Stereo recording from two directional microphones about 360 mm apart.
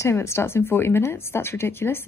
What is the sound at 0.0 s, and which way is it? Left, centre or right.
Speech, centre.